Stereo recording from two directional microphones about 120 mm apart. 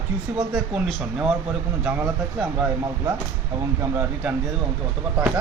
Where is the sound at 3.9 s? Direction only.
20° right (ahead or behind).